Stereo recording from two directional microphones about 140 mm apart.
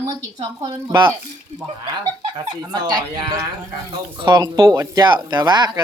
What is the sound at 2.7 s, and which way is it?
Speech, 30° right (ahead or behind).